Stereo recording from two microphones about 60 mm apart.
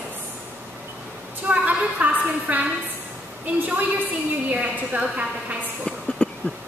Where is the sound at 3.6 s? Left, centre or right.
Right.